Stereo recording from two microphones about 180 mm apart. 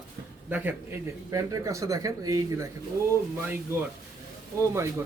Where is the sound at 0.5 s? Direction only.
10° right (ahead or behind).